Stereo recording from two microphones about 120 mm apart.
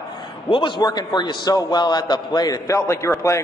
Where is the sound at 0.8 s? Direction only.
35° left (ahead or behind).